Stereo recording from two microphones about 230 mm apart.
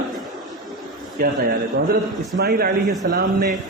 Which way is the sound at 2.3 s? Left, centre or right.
Right.